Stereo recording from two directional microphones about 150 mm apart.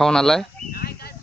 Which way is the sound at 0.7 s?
90° left.